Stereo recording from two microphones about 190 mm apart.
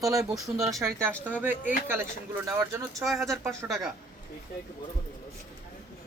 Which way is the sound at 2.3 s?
15° right (ahead or behind).